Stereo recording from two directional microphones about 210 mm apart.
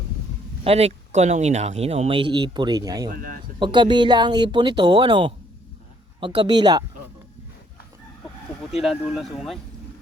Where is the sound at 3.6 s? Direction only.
25° right (ahead or behind).